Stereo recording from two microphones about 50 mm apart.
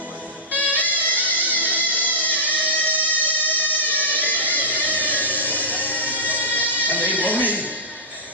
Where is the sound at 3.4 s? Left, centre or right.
Left.